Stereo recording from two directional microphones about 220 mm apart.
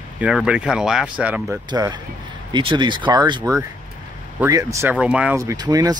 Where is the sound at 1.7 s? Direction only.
20° right (ahead or behind).